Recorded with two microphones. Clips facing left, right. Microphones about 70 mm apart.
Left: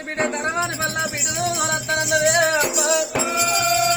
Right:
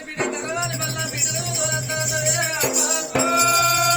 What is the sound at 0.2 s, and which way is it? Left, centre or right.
Music, left.